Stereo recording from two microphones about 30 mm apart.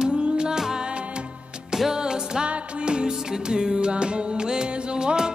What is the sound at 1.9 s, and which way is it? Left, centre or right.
Music, right.